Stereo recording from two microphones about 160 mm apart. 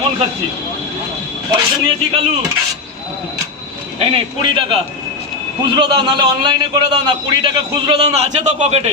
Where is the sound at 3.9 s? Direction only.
35° right (ahead or behind).